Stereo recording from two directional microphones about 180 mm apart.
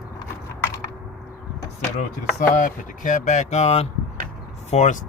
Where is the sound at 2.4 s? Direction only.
50° left (ahead or behind).